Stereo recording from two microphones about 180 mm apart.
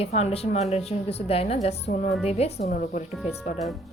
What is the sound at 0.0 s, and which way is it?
A woman's voice, 35° left (ahead or behind).